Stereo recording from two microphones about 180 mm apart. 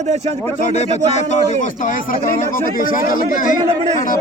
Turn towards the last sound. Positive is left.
turn(degrees=50)  # may be behind; listen again after turning